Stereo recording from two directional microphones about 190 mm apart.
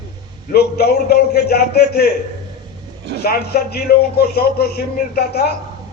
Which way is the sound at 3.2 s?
55° left (ahead or behind).